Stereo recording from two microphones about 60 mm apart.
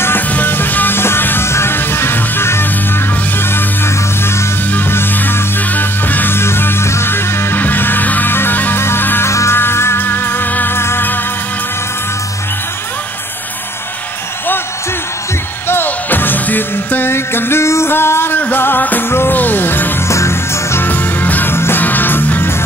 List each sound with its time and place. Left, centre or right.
0.3 s music: left
4.7 s music: left
6.3 s music: left
9.3 s music: left
9.6 s music: left
15.7 s music: left
20.1 s music: left
20.8 s music: left